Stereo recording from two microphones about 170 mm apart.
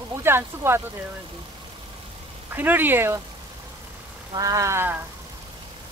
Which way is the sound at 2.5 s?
10° right (ahead or behind).